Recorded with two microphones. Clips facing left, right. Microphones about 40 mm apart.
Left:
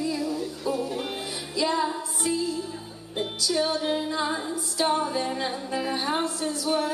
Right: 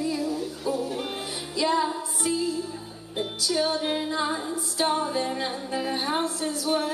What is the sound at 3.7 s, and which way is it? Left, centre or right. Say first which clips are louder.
Music: even; centre.